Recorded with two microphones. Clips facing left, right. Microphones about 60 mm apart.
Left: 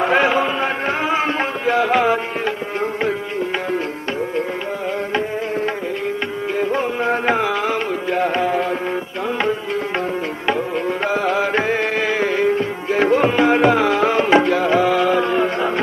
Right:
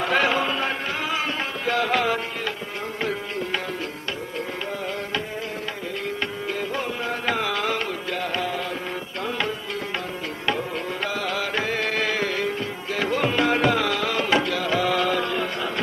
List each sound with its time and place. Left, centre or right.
0.0 s music: left
6.6 s music: left
11.0 s music: left